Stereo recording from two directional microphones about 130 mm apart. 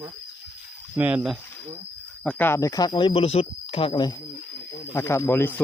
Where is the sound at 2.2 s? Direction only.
10° left (ahead or behind); by 4.2 s 35° left (ahead or behind).